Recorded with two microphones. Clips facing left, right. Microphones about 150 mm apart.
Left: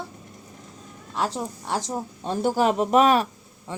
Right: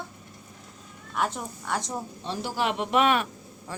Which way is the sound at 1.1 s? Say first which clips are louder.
Left 2 dB; 30° left (ahead or behind).